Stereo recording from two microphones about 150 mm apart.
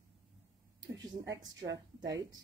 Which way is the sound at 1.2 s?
25° right (ahead or behind).